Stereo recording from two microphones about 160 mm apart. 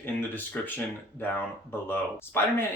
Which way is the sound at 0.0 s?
10° left (ahead or behind).